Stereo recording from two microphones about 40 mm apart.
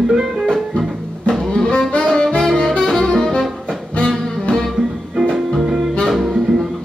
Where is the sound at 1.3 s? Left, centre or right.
Centre.